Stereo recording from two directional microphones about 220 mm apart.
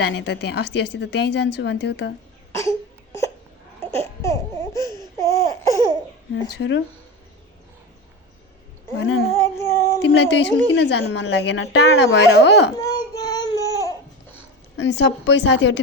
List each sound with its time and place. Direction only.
0.0 s a woman's voice: 50° left (ahead or behind)
2.6 s a sound: 15° left (ahead or behind)
5.2 s laughter: 15° left (ahead or behind)
6.3 s speech: 50° left (ahead or behind)
9.0 s speech: 55° left (ahead or behind)
9.3 s child singing: 15° left (ahead or behind)
10.0 s a woman's voice: 50° left (ahead or behind)
12.8 s child singing: 20° left (ahead or behind)
14.8 s a woman's voice: 55° left (ahead or behind)